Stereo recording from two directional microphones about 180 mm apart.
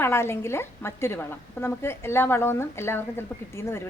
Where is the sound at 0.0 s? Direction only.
15° left (ahead or behind).